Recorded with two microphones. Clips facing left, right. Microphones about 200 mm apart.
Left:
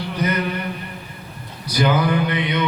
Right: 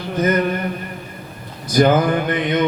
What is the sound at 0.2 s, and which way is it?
Mantra, 45° right (ahead or behind).